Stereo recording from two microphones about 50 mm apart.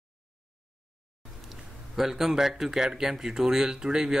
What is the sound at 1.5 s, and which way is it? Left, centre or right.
Speech, centre.